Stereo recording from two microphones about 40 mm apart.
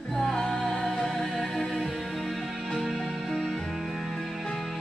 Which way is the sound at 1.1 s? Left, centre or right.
Centre.